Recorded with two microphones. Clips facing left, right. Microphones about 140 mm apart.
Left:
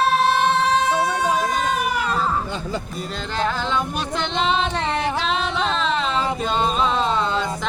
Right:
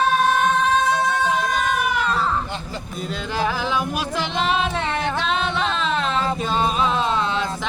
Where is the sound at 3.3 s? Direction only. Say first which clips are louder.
Even; 5° right (ahead or behind).